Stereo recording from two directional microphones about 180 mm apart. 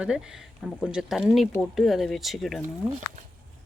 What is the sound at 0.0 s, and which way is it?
Speech, 5° right (ahead or behind).